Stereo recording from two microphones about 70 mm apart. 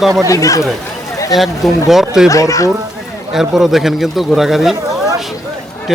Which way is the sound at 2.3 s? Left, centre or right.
Left.